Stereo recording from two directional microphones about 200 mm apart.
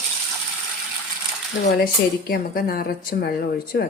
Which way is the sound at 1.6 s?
50° left (ahead or behind).